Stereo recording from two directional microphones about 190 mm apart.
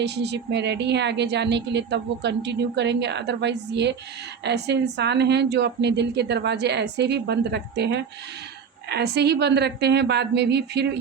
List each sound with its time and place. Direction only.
0.0 s speech: 60° right (ahead or behind)